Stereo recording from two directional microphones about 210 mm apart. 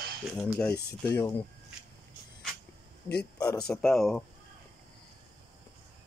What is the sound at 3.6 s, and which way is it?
Speech, 5° left (ahead or behind).